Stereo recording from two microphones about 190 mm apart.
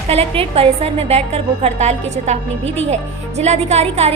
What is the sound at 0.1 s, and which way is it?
Speech, 30° right (ahead or behind).